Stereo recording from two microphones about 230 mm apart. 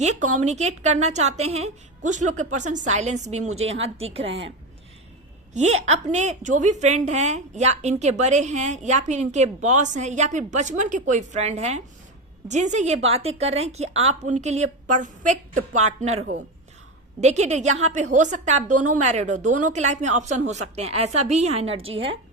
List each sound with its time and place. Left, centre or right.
0.0 s a woman's voice: right
5.5 s a woman's voice: right